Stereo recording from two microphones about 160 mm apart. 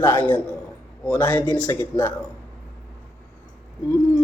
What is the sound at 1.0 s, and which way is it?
A man's voice, 10° left (ahead or behind).